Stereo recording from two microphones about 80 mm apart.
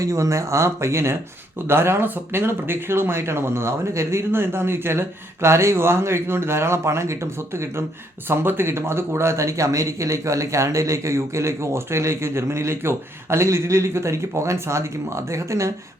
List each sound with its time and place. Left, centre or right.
0.0 s speech: right